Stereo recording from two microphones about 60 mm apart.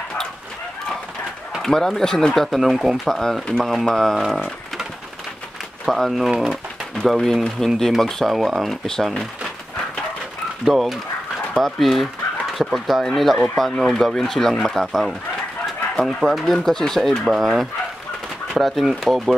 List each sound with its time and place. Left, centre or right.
1.6 s speech: centre
3.1 s speech: centre
5.9 s speech: centre
10.6 s speech: centre
16.2 s speech: centre